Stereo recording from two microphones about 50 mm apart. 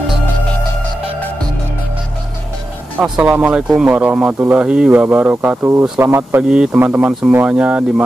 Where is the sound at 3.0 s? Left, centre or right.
Right.